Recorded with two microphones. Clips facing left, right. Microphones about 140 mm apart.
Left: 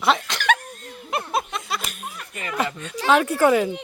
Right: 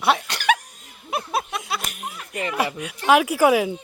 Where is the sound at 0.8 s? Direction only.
5° right (ahead or behind).